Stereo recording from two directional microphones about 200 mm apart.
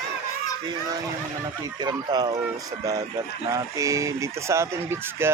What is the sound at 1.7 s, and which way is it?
Speech, 20° right (ahead or behind).